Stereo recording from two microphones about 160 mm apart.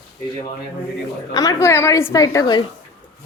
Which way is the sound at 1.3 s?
20° left (ahead or behind).